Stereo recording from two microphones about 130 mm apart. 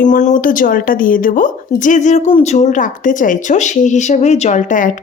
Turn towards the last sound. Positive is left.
turn(degrees=80)